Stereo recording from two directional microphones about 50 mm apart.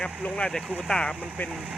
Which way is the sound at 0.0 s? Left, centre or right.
Centre.